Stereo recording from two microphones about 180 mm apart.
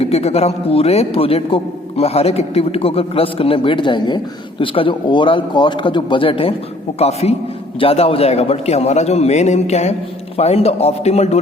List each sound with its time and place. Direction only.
0.0 s a man's voice: 35° left (ahead or behind)